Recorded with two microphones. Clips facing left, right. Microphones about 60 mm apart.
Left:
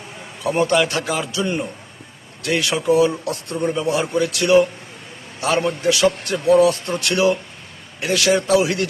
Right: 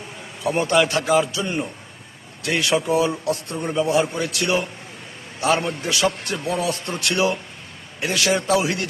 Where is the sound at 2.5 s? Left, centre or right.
Centre.